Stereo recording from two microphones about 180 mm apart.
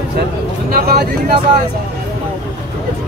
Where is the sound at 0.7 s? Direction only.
60° right (ahead or behind).